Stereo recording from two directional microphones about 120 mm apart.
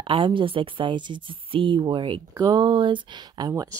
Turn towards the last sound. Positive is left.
turn(degrees=-30)  # may be behind; listen again after turning